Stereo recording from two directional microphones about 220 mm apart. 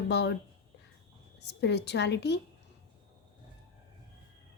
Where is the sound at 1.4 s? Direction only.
50° left (ahead or behind).